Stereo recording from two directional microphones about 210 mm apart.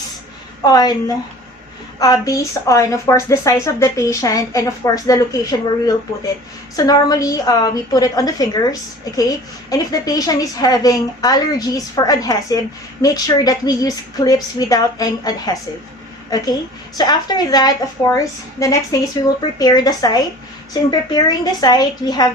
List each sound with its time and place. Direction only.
0.6 s a woman's voice: 20° left (ahead or behind)
17.0 s a woman's voice: 20° left (ahead or behind)